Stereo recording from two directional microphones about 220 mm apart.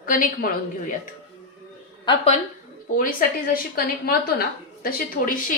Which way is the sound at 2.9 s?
40° left (ahead or behind).